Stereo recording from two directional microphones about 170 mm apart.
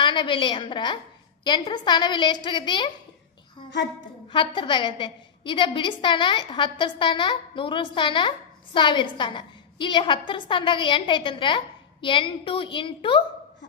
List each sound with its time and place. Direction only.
0.0 s a woman's voice: 30° left (ahead or behind)
4.3 s a woman's voice: 30° left (ahead or behind)